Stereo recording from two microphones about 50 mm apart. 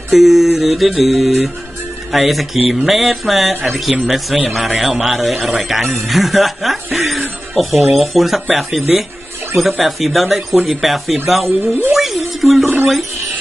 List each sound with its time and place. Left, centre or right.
0.1 s a sound: centre
7.5 s speech: centre
8.0 s a sound: centre
11.6 s speech: right
11.9 s music: centre
12.6 s speech: right